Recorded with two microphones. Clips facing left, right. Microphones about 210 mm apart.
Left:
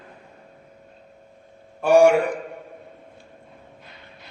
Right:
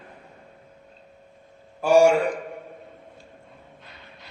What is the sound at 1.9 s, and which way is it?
Speech, 60° left (ahead or behind).